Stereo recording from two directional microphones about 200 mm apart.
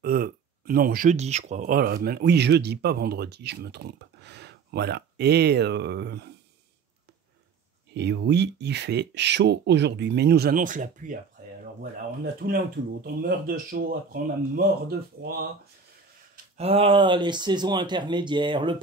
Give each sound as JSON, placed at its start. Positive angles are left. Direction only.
{"t": 0.0, "sound": "speech", "side_deg": -50}
{"t": 7.9, "sound": "speech", "side_deg": -60}
{"t": 12.4, "sound": "speech", "side_deg": -45}
{"t": 16.5, "sound": "speech", "side_deg": -30}